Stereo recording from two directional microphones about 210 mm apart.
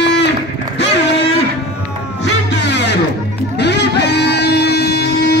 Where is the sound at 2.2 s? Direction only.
55° left (ahead or behind).